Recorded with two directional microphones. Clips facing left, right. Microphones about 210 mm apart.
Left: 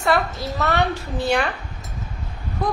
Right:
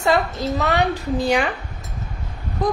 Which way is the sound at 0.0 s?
15° right (ahead or behind).